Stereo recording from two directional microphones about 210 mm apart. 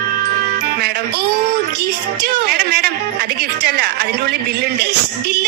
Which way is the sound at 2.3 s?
50° right (ahead or behind).